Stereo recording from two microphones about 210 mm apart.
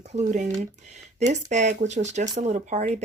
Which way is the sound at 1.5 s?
35° right (ahead or behind).